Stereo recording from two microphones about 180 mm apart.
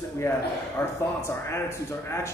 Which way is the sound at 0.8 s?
15° left (ahead or behind).